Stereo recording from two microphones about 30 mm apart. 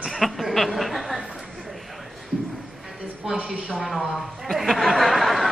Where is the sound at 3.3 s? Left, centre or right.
Right.